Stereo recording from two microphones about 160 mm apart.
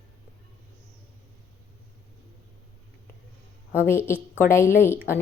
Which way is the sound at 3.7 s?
15° left (ahead or behind).